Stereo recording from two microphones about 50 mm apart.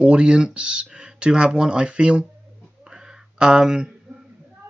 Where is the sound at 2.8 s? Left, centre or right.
Centre.